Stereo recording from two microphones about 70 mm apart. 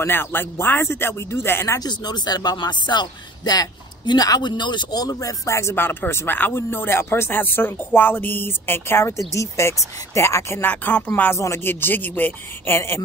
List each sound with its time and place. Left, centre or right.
0.0 s speech: left
1.8 s speech: left
10.7 s speech: left